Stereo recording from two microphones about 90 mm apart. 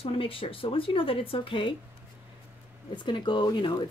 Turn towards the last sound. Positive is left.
turn(degrees=60)  # may be behind; listen again after turning